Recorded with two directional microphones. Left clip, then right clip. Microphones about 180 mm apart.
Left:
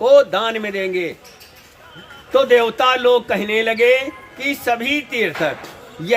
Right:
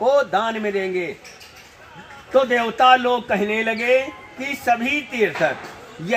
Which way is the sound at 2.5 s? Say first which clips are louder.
Even; 35° left (ahead or behind).